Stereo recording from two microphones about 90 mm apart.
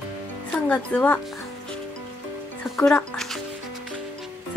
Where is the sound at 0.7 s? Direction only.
15° left (ahead or behind).